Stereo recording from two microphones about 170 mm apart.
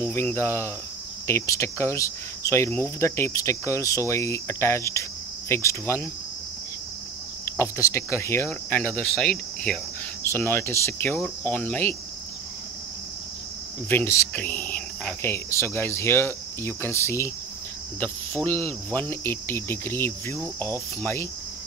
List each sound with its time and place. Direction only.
0.0 s speech: 15° left (ahead or behind)
7.4 s speech: 15° left (ahead or behind)
13.8 s speech: 15° left (ahead or behind)